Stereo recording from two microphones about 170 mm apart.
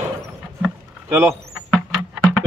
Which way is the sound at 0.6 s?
15° right (ahead or behind).